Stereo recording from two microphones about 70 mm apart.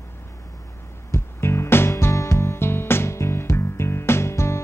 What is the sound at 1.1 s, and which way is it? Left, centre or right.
Music, left.